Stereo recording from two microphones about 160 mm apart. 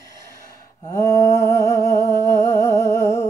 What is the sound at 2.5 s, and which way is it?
Humming, 20° left (ahead or behind).